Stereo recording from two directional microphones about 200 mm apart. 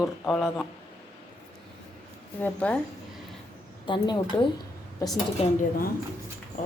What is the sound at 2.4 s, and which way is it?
Speech, 5° left (ahead or behind).